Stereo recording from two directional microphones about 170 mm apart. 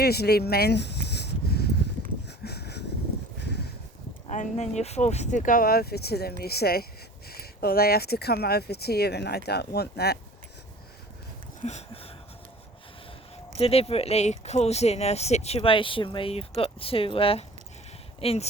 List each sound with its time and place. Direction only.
0.0 s a sound: 70° left (ahead or behind)
4.3 s speech: 45° left (ahead or behind); by 10.2 s 70° left (ahead or behind)
11.6 s speech: 40° left (ahead or behind)
13.6 s speech: 35° left (ahead or behind)